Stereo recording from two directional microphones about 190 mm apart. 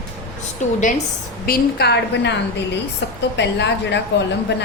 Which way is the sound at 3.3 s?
65° left (ahead or behind).